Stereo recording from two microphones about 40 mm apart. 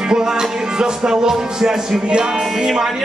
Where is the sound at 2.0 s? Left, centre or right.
Right.